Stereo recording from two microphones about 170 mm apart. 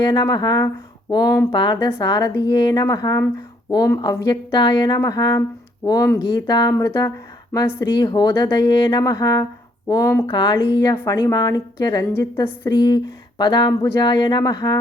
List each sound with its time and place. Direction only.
0.0 s speech: 25° left (ahead or behind)